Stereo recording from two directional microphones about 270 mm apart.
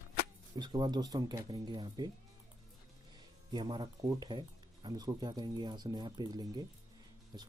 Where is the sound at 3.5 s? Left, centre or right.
Centre.